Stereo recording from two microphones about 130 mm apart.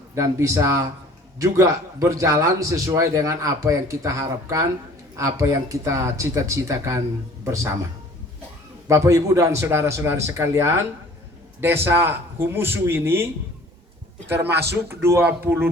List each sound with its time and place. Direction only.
0.1 s a man's voice: 20° right (ahead or behind)
8.9 s a man's voice: 25° right (ahead or behind)
14.4 s a man's voice: 20° right (ahead or behind)